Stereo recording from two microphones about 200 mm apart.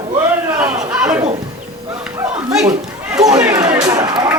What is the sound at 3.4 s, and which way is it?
Chatter, 15° right (ahead or behind).